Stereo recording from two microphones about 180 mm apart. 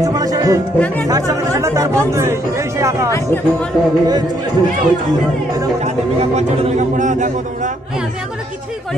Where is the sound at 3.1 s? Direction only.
10° left (ahead or behind).